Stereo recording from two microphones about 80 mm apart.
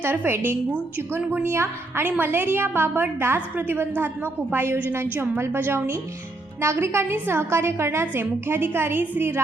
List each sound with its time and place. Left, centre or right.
0.0 s a woman's voice: right